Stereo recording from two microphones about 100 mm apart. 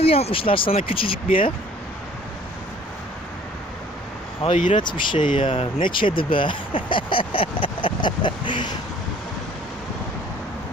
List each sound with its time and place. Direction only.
0.0 s speech: 75° left (ahead or behind)
4.4 s speech: 60° left (ahead or behind)